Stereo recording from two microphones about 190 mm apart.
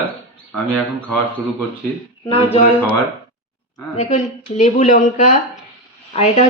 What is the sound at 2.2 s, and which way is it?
Speech, 30° left (ahead or behind).